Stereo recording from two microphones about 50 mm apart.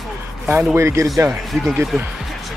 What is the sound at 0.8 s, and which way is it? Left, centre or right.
Speech, right.